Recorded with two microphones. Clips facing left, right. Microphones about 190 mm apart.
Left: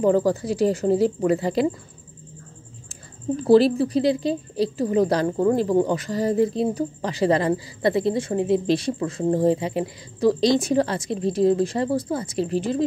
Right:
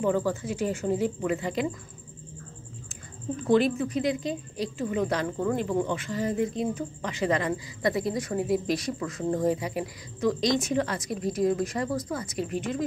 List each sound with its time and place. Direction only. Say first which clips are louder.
0.0 s a woman's voice: left 7 dB; 40° left (ahead or behind)
3.3 s a woman's voice: left 7 dB; 35° left (ahead or behind)